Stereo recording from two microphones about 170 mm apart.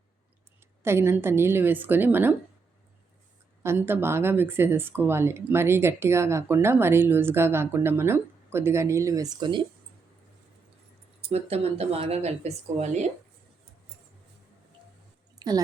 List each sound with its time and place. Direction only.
0.8 s speech: 15° right (ahead or behind)
3.6 s speech: 15° right (ahead or behind)
11.3 s speech: 35° right (ahead or behind)
15.4 s speech: 25° right (ahead or behind)